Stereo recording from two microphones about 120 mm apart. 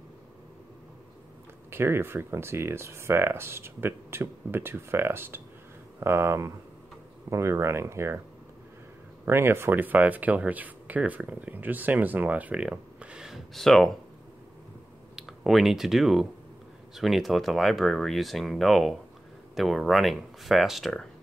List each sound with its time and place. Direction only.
1.7 s speech: 20° right (ahead or behind)
9.2 s speech: 20° right (ahead or behind); by 13.9 s centre (ahead or behind)
15.1 s speech: 5° right (ahead or behind)